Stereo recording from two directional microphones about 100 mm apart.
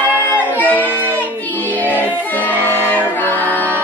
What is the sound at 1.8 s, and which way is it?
Music, 20° left (ahead or behind).